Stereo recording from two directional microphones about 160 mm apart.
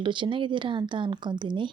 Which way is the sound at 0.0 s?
30° right (ahead or behind).